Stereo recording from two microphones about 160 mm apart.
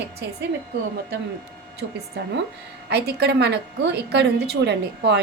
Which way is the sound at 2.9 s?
90° right.